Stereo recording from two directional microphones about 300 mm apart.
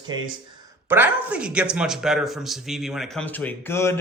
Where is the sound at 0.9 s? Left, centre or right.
Centre.